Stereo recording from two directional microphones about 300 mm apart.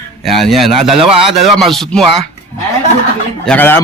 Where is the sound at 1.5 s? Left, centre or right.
Centre.